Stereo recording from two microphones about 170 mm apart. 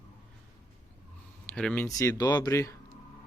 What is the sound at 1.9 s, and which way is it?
Speech, 20° left (ahead or behind).